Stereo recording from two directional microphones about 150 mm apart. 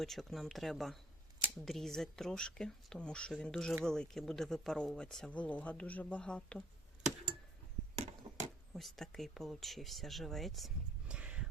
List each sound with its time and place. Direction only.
0.0 s speech: centre (ahead or behind)
7.9 s chop: 50° right (ahead or behind)
8.7 s speech: centre (ahead or behind)
11.1 s a sound: 10° right (ahead or behind)